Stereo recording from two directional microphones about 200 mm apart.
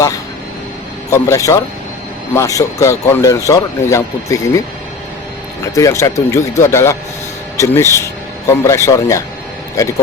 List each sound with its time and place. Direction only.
1.1 s speech: 15° left (ahead or behind)
5.7 s speech: 15° left (ahead or behind)